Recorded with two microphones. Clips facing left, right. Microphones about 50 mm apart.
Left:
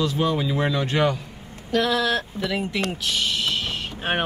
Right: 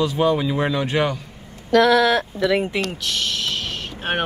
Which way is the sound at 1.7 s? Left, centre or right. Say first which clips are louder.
Right 7 dB; right.